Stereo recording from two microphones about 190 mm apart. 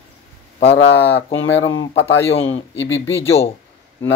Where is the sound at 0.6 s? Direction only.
65° left (ahead or behind); by 1.7 s 85° left.